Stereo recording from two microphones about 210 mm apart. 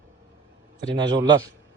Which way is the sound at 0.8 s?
20° right (ahead or behind).